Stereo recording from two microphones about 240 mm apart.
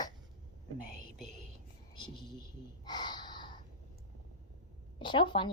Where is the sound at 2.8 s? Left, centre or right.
Centre.